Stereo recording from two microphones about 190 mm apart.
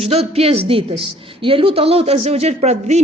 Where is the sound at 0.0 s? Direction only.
30° right (ahead or behind).